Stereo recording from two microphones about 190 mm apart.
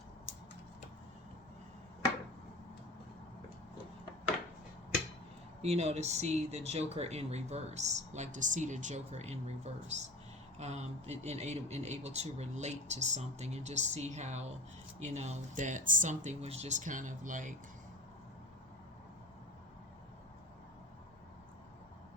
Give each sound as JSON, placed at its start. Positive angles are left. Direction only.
{"t": 5.6, "sound": "speech", "side_deg": -35}